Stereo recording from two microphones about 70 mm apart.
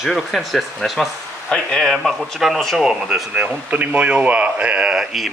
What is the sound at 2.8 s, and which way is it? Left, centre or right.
Speech, centre.